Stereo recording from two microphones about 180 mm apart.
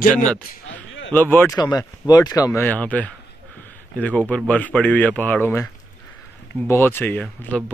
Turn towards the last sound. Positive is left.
turn(degrees=5)  # may be behind; listen again after turning